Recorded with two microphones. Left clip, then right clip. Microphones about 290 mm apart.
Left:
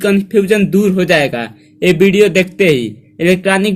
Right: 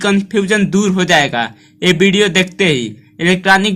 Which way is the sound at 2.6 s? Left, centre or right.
Right.